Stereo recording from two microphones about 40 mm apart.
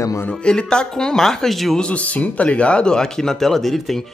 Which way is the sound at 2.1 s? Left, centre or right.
Left.